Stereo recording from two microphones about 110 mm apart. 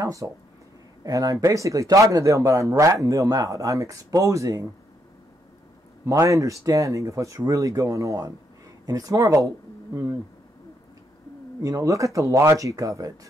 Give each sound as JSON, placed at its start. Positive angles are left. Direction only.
{"t": 0.0, "sound": "speech", "side_deg": -30}
{"t": 6.0, "sound": "speech", "side_deg": -30}
{"t": 11.6, "sound": "speech", "side_deg": -30}